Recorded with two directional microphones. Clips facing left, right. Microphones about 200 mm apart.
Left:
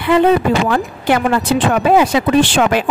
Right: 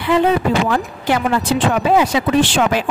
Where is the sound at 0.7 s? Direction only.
60° left (ahead or behind).